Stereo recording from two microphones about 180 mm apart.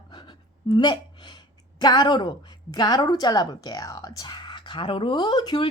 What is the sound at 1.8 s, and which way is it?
Speech, 25° left (ahead or behind).